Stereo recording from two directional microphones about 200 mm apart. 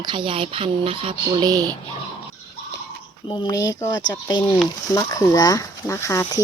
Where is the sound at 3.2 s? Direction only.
20° left (ahead or behind).